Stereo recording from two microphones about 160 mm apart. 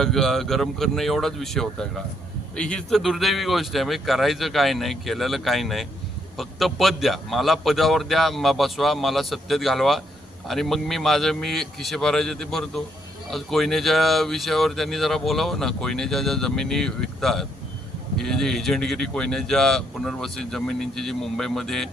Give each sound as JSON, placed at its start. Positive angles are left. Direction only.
{"t": 0.0, "sound": "speech", "side_deg": 0}